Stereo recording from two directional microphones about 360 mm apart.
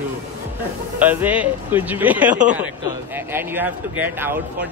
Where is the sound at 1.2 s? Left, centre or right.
Centre.